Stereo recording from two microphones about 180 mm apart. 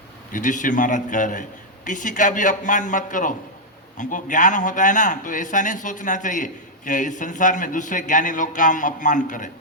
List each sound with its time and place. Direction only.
0.3 s a man's voice: 45° left (ahead or behind)